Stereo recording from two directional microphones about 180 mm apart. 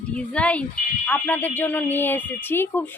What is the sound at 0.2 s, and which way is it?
A woman's voice, 5° left (ahead or behind).